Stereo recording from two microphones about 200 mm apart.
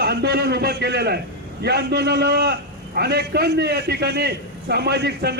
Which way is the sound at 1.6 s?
55° right (ahead or behind).